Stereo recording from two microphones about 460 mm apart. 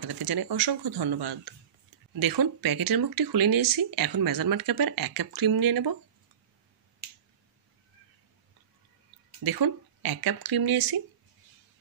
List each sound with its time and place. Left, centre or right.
0.1 s speech: right
9.4 s speech: right